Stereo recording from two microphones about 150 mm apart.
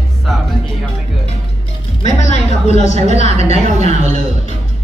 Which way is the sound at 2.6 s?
50° left (ahead or behind).